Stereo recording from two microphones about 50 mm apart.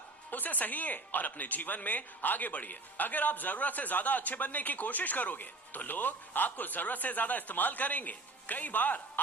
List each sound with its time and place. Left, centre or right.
0.3 s speech: left